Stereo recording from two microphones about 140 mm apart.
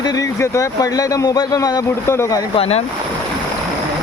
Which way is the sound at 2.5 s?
45° left (ahead or behind).